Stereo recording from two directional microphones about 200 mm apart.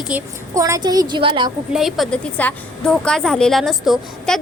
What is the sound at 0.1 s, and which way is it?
A woman's voice, 15° right (ahead or behind).